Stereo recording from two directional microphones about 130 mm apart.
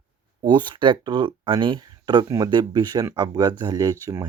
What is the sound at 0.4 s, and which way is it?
Speech, 35° right (ahead or behind).